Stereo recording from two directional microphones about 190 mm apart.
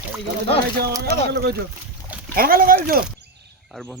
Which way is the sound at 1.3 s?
60° right (ahead or behind).